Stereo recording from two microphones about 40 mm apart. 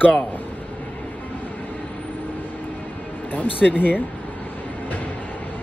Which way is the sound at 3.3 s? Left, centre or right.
Left.